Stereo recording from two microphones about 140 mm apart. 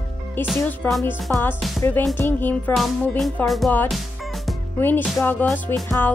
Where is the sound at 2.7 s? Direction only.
Centre (ahead or behind).